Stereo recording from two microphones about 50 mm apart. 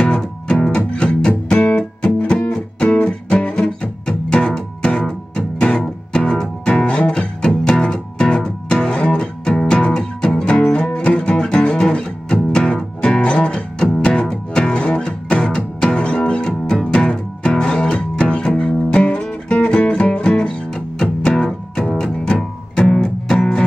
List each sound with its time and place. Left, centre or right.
0.0 s music: centre